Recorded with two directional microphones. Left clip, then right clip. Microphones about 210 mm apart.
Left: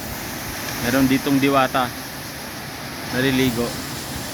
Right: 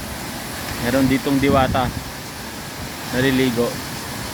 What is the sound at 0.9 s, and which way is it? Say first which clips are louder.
Speech: even; 5° right (ahead or behind).